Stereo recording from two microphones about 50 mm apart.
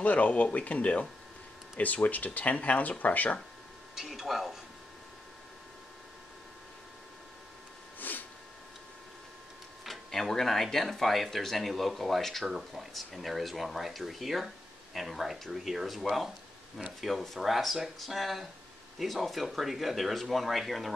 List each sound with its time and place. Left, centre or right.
0.0 s speech: left
3.9 s speech: centre
8.0 s a sound: left
9.8 s speech: centre